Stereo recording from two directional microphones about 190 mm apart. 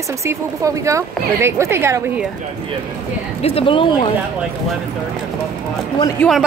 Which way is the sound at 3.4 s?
30° left (ahead or behind).